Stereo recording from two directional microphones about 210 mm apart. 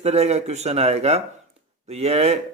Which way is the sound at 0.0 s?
30° right (ahead or behind).